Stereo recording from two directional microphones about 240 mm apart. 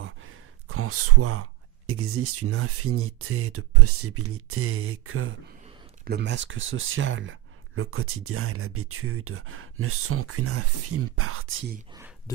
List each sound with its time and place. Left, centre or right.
0.0 s a sound: right
1.9 s speech: right
6.0 s speech: right